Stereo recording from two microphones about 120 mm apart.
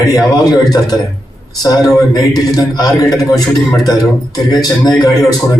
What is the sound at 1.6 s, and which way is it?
A man's voice, 30° left (ahead or behind).